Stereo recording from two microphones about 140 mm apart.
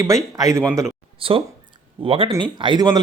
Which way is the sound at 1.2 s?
40° right (ahead or behind).